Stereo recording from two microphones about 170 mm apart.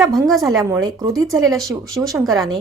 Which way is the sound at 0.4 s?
20° right (ahead or behind).